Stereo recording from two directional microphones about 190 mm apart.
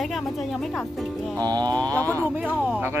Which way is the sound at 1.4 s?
20° right (ahead or behind).